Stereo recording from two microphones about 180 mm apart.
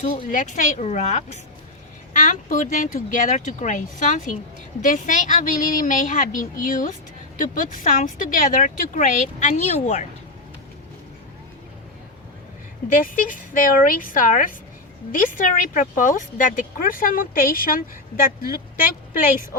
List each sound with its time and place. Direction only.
0.3 s speech: 45° left (ahead or behind)
12.9 s speech: 45° left (ahead or behind)